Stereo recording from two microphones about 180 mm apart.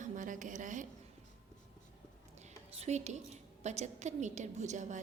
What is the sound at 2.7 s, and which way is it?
A woman's voice, 40° right (ahead or behind).